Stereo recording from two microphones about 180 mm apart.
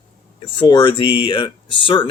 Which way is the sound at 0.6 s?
25° left (ahead or behind).